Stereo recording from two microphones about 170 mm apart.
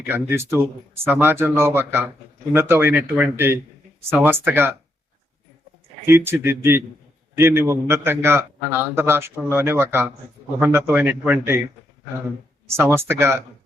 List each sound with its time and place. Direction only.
0.0 s a man's voice: 10° right (ahead or behind)
6.1 s a man's voice: 15° right (ahead or behind)
12.6 s a man's voice: 15° right (ahead or behind)